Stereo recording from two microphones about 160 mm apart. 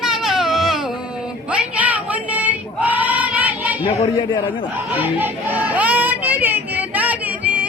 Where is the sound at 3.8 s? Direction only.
40° left (ahead or behind).